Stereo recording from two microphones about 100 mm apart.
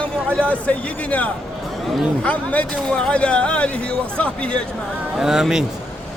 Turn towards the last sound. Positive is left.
turn(degrees=-5)  # may be behind; listen again after turning